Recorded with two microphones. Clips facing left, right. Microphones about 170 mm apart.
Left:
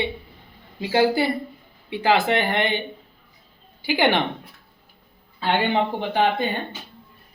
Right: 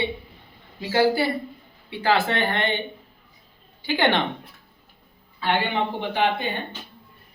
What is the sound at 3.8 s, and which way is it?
Speech, 10° left (ahead or behind).